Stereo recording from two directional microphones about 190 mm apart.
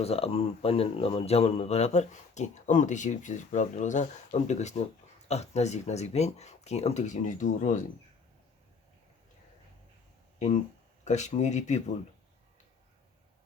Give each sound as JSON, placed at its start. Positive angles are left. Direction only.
{"t": 0.0, "sound": "speech", "side_deg": 30}
{"t": 11.0, "sound": "speech", "side_deg": 35}